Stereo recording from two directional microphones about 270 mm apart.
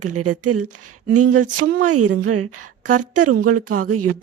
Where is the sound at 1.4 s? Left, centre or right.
Right.